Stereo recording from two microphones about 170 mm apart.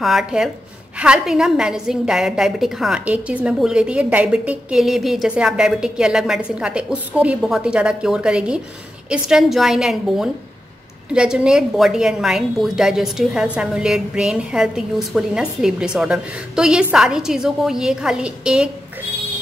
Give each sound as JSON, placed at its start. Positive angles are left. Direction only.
{"t": 0.0, "sound": "a woman's voice", "side_deg": 0}